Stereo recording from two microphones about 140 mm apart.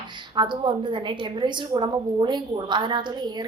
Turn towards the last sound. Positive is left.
turn(degrees=-35)  # may be behind; listen again after turning